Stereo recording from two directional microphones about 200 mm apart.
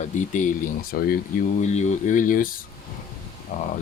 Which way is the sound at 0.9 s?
50° left (ahead or behind).